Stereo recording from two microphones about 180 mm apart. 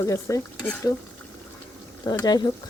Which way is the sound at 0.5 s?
10° left (ahead or behind).